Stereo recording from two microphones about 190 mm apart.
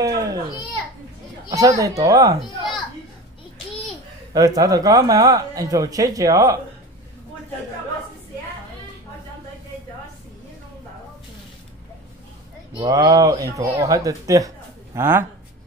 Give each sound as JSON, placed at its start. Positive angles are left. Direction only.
{"t": 0.0, "sound": "speech", "side_deg": -20}
{"t": 1.5, "sound": "speech", "side_deg": -15}
{"t": 4.3, "sound": "speech", "side_deg": -20}
{"t": 12.7, "sound": "speech", "side_deg": -20}